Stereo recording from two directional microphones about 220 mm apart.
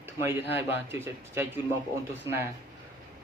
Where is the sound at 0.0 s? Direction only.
10° right (ahead or behind).